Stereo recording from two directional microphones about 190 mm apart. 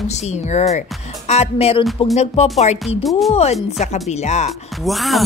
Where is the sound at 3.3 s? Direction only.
35° left (ahead or behind).